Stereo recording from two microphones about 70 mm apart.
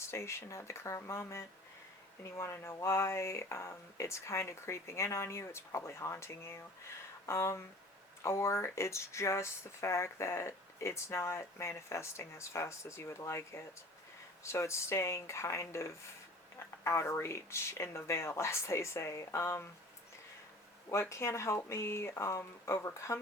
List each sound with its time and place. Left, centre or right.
0.0 s speech: left
20.9 s speech: left